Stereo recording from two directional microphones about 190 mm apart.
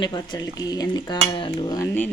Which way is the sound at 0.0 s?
20° left (ahead or behind).